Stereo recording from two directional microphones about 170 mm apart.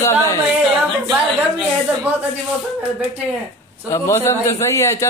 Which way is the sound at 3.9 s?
15° left (ahead or behind).